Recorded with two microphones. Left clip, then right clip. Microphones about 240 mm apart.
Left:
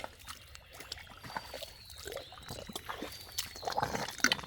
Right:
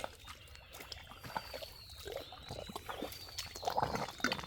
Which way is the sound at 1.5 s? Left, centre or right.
Left.